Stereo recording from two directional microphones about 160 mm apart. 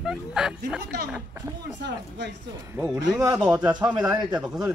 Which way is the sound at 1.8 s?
90° right.